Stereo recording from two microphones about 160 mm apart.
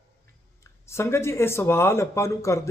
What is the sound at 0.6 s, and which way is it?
Speech, 15° left (ahead or behind).